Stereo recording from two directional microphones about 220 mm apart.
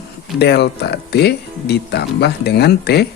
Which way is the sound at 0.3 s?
50° left (ahead or behind).